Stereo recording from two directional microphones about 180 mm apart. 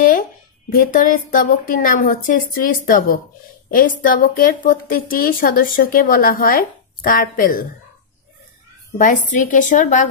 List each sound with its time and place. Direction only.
0.7 s a woman's voice: 50° left (ahead or behind)
8.9 s a woman's voice: 45° left (ahead or behind)